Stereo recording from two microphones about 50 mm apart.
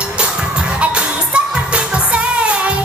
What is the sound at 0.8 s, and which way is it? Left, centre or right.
Music, right.